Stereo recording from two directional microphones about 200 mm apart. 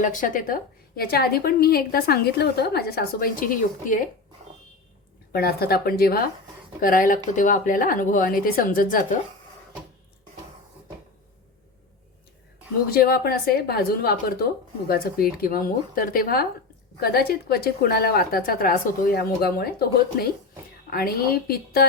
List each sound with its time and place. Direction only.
0.0 s a woman's voice: 40° left (ahead or behind)
5.3 s a woman's voice: 50° left (ahead or behind)
12.9 s a woman's voice: 50° left (ahead or behind)
20.9 s a woman's voice: 50° left (ahead or behind)